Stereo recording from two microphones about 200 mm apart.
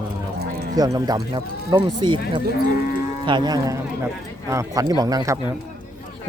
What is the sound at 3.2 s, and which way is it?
Speech, 20° right (ahead or behind).